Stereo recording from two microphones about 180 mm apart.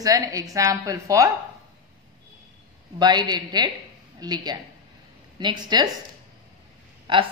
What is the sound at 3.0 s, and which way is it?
A woman's voice, 25° right (ahead or behind).